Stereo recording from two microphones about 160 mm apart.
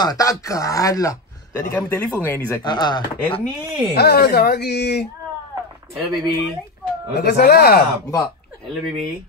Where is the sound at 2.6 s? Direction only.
25° left (ahead or behind).